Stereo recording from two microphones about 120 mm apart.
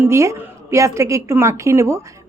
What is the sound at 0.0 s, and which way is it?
A woman's voice, 25° right (ahead or behind).